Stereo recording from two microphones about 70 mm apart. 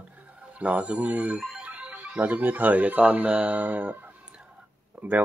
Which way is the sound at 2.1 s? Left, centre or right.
Right.